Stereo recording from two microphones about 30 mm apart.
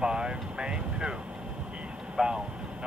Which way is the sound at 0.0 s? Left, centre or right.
Right.